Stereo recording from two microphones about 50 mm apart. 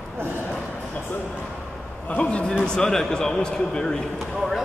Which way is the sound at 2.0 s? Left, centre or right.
Left.